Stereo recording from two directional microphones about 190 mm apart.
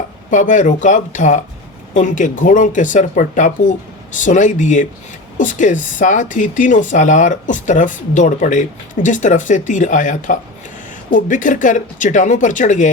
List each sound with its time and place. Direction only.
0.3 s speech: 40° left (ahead or behind)